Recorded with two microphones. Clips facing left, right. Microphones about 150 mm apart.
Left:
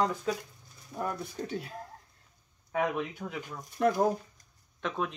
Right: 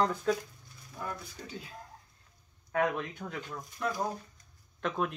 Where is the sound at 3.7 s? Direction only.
60° left (ahead or behind).